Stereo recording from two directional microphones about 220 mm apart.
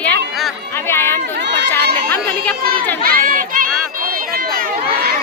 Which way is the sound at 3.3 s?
40° right (ahead or behind).